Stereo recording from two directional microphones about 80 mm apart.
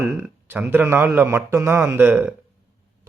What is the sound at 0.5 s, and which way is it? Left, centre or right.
A man's voice, right.